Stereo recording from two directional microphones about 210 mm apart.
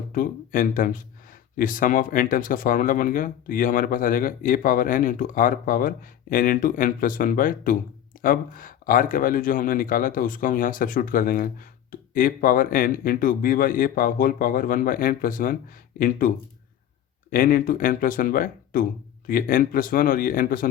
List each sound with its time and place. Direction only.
0.1 s speech: 40° left (ahead or behind)
17.3 s speech: 40° left (ahead or behind)